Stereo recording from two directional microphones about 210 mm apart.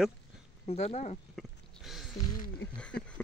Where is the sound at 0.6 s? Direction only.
30° left (ahead or behind).